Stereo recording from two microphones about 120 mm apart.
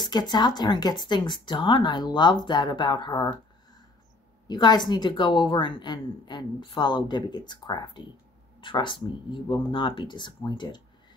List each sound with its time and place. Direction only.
0.0 s a woman's voice: 35° left (ahead or behind)
4.5 s a woman's voice: 40° left (ahead or behind)